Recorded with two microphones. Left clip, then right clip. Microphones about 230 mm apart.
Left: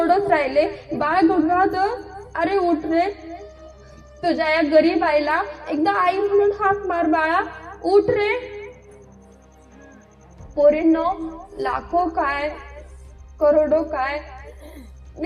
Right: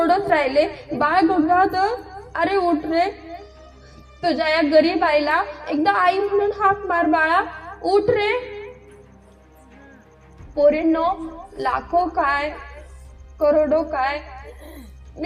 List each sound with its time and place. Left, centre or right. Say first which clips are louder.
0.0 s a woman's voice: even; right
4.2 s a woman's voice: even; right
10.6 s a woman's voice: left 1 dB; right